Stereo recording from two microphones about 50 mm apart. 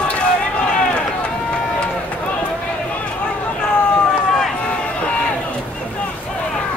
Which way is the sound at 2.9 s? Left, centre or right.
Left.